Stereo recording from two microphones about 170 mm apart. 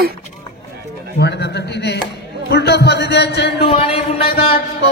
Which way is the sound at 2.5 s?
75° left (ahead or behind).